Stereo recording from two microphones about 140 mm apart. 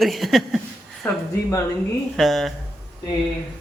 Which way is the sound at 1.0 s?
20° left (ahead or behind).